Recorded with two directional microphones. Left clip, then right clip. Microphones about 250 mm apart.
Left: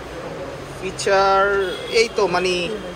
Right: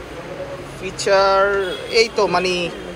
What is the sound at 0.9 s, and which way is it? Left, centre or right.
Speech, centre.